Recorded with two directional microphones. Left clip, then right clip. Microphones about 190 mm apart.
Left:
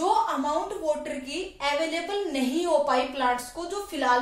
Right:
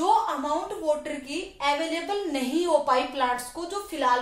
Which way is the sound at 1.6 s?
25° right (ahead or behind).